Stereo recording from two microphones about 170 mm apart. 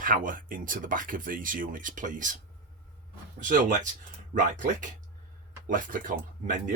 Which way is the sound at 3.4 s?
55° right (ahead or behind).